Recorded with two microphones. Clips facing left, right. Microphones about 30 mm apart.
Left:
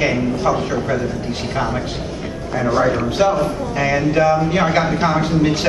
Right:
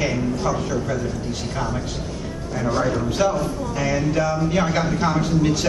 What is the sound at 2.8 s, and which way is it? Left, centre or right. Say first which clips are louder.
A man's voice: left 4 dB; left.